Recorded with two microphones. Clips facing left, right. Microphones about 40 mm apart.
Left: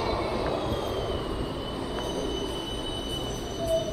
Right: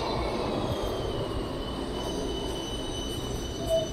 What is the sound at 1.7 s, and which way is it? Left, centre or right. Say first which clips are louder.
Train: left 1 dB; left.